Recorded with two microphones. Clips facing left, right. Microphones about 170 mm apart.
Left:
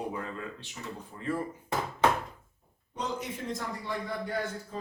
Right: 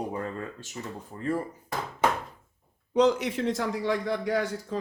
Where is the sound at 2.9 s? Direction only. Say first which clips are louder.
Right 13 dB; 80° right.